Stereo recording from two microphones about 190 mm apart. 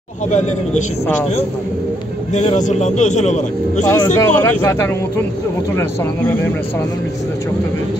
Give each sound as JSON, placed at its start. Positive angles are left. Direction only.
{"t": 0.3, "sound": "a man's voice", "side_deg": 40}
{"t": 2.3, "sound": "a man's voice", "side_deg": 40}
{"t": 3.8, "sound": "speech", "side_deg": 15}